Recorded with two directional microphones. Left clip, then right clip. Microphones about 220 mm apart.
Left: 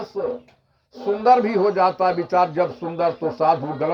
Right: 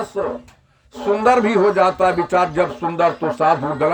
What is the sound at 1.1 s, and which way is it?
Speech, 15° right (ahead or behind).